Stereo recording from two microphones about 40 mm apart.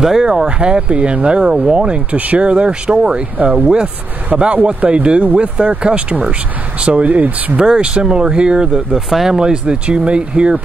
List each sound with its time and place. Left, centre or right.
0.0 s speech: centre
2.1 s speech: right
3.6 s speech: right
4.3 s speech: right
7.5 s speech: right
8.9 s speech: centre; by 10.6 s right